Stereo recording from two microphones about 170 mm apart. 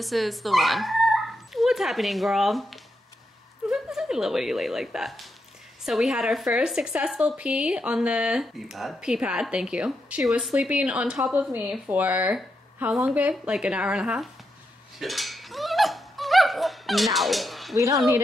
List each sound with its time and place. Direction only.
0.0 s a woman's voice: centre (ahead or behind)
15.0 s a sound: centre (ahead or behind)
17.7 s speech: 20° right (ahead or behind)